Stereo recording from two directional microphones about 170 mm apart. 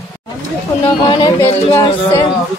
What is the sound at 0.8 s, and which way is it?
Speech, 25° left (ahead or behind).